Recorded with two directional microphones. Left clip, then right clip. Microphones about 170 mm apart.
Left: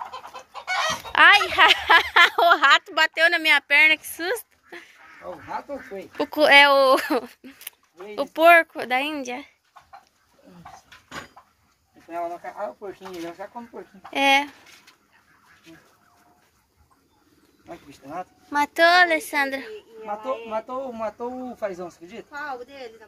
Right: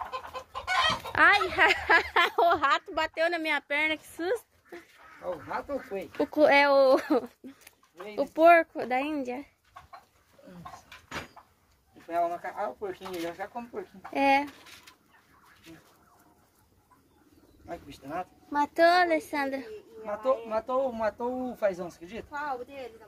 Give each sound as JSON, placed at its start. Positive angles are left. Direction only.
{"t": 0.3, "sound": "chicken", "side_deg": -25}
{"t": 1.1, "sound": "a sound", "side_deg": -5}
{"t": 1.5, "sound": "speech", "side_deg": -5}
{"t": 6.3, "sound": "speech", "side_deg": -5}
{"t": 12.1, "sound": "speech", "side_deg": 0}
{"t": 18.0, "sound": "speech", "side_deg": -20}
{"t": 18.6, "sound": "speech", "side_deg": 0}
{"t": 21.2, "sound": "speech", "side_deg": -30}
{"t": 22.3, "sound": "speech", "side_deg": 55}